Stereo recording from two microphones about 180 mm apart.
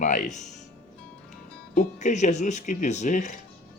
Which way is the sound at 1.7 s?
40° left (ahead or behind).